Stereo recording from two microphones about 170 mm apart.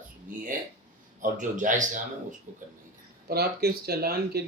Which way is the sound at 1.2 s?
50° right (ahead or behind).